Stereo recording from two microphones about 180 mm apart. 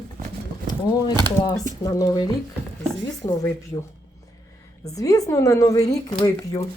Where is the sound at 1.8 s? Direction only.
20° left (ahead or behind).